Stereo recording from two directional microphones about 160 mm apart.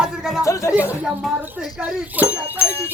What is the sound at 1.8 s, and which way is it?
Speech, 10° right (ahead or behind).